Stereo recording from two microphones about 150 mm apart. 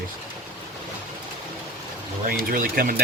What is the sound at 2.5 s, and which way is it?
Speech, 65° right (ahead or behind).